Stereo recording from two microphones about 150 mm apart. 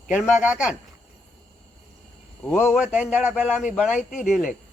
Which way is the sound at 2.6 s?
5° right (ahead or behind).